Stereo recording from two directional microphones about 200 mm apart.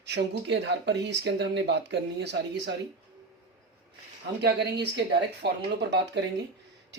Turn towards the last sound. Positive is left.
turn(degrees=-55)  # may be behind; listen again after turning